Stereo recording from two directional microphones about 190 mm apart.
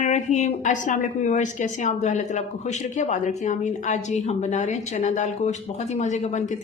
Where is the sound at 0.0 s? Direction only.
35° left (ahead or behind).